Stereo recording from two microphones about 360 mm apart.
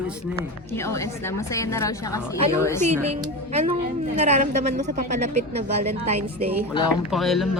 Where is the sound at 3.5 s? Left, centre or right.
Centre.